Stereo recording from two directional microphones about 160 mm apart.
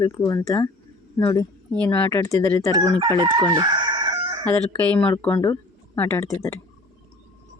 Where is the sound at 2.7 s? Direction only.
25° right (ahead or behind).